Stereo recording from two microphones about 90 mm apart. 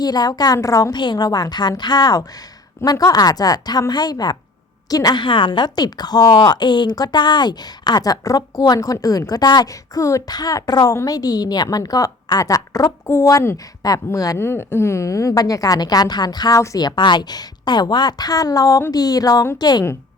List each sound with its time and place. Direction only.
0.0 s speech: 45° left (ahead or behind)
0.9 s a woman's voice: 55° left (ahead or behind)
14.3 s a woman's voice: 25° left (ahead or behind); by 16.6 s 50° left (ahead or behind)
16.6 s a woman's voice: 35° left (ahead or behind)
16.8 s speech: 55° left (ahead or behind)